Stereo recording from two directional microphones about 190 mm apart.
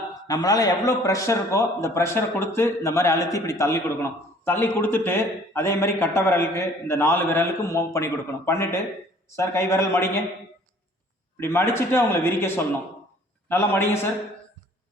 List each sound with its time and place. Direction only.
0.1 s a man's voice: 20° left (ahead or behind)
11.3 s a man's voice: 10° left (ahead or behind)